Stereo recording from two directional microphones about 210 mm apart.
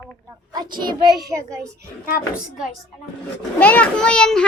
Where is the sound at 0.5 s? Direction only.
20° right (ahead or behind).